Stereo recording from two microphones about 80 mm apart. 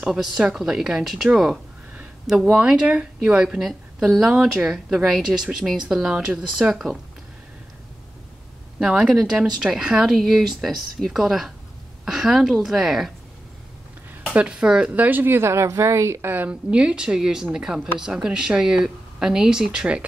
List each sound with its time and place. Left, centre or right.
0.0 s a woman's voice: centre
8.7 s a woman's voice: centre
14.3 s a woman's voice: centre
14.9 s speech: right
16.4 s a woman's voice: centre